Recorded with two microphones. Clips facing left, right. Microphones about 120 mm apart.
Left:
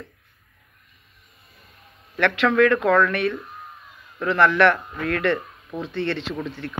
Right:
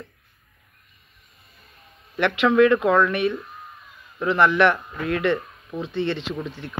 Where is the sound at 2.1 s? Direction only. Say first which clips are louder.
Right 1 dB; 10° right (ahead or behind).